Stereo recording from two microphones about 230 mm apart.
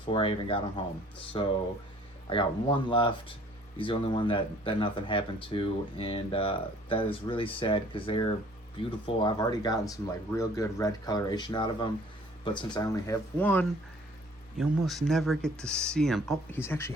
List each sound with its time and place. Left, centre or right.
0.1 s speech: left